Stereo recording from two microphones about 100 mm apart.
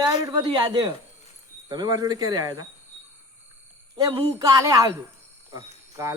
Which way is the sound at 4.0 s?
45° right (ahead or behind).